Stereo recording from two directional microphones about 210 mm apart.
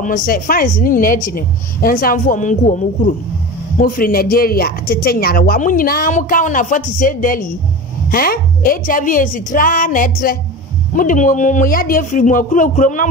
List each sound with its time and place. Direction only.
0.0 s a woman's voice: 40° left (ahead or behind)